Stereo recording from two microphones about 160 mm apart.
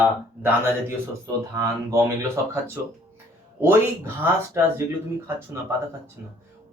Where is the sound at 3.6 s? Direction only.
10° right (ahead or behind).